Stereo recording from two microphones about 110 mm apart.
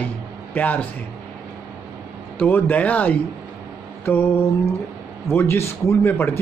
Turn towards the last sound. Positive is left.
turn(degrees=20)  # may be behind; listen again after turning